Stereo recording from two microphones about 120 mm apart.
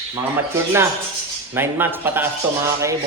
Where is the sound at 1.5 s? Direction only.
20° right (ahead or behind).